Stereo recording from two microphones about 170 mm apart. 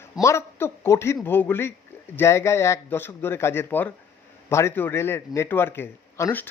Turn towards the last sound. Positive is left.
turn(degrees=15)  # may be behind; listen again after turning